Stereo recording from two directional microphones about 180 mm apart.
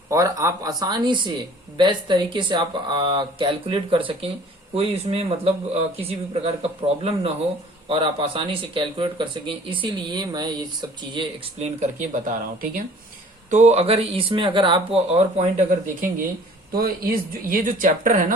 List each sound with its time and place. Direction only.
0.1 s speech: 20° right (ahead or behind)
11.8 s speech: 45° right (ahead or behind)